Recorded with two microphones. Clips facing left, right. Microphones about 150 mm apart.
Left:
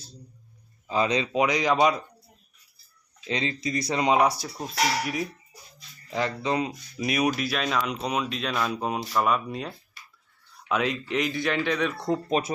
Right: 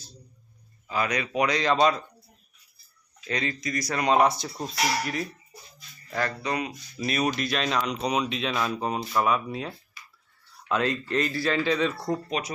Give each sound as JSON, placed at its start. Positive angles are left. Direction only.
{"t": 0.9, "sound": "speech", "side_deg": 25}
{"t": 3.2, "sound": "speech", "side_deg": 25}
{"t": 6.1, "sound": "speech", "side_deg": 20}
{"t": 7.0, "sound": "speech", "side_deg": 10}